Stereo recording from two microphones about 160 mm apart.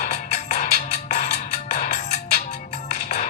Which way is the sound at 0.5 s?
70° left (ahead or behind).